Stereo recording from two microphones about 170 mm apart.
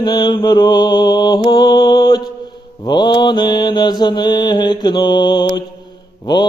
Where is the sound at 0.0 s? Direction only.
25° left (ahead or behind).